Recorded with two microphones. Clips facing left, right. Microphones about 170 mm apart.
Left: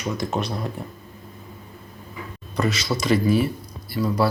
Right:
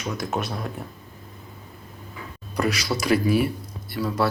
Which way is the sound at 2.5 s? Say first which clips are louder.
Left 1 dB; 10° right (ahead or behind).